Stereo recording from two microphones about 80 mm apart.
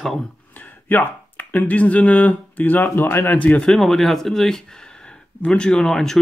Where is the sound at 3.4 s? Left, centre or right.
Centre.